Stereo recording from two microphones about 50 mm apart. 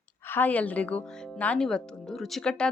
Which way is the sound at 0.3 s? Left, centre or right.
Left.